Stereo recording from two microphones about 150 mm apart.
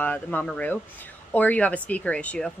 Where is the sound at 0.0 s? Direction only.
10° left (ahead or behind).